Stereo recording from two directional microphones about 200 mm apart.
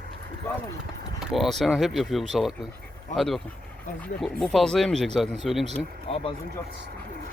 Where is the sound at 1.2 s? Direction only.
Centre (ahead or behind).